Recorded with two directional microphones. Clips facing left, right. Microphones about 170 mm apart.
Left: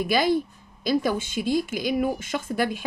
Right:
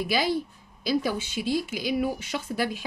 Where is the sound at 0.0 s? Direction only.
50° left (ahead or behind).